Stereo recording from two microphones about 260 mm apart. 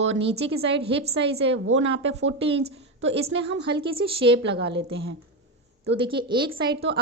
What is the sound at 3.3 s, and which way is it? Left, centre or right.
Speech, right.